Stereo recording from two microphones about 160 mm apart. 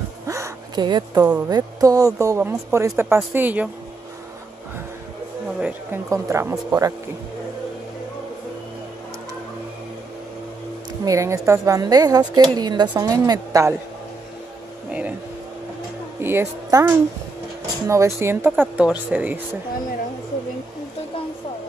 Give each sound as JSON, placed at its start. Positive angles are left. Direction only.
{"t": 0.3, "sound": "a sound", "side_deg": -25}
{"t": 1.5, "sound": "speech", "side_deg": -20}
{"t": 5.6, "sound": "a woman's voice", "side_deg": -10}
{"t": 11.1, "sound": "a woman's voice", "side_deg": -20}
{"t": 14.9, "sound": "speech", "side_deg": -10}
{"t": 16.2, "sound": "speech", "side_deg": -15}